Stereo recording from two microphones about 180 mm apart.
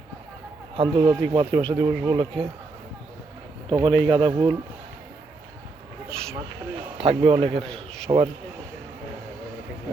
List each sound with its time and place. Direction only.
0.8 s speech: 25° right (ahead or behind)
3.7 s speech: 25° right (ahead or behind)
6.1 s speech: 5° left (ahead or behind)
7.0 s a man's voice: 30° right (ahead or behind)